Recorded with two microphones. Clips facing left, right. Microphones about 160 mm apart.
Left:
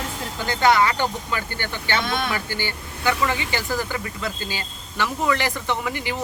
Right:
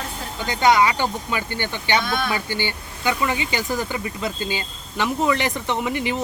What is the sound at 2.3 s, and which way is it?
Speech, 20° right (ahead or behind).